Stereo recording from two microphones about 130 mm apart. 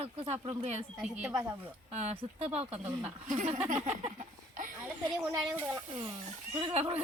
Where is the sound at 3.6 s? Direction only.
60° right (ahead or behind).